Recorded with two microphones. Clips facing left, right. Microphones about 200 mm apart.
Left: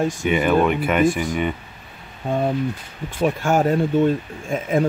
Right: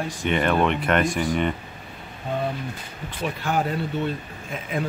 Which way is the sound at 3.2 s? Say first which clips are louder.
Left 7 dB; 45° left (ahead or behind).